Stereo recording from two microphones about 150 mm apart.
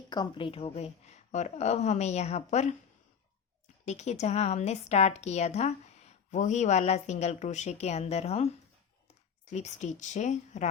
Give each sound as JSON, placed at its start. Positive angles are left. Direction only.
{"t": 0.1, "sound": "a woman's voice", "side_deg": 30}
{"t": 3.8, "sound": "a woman's voice", "side_deg": 50}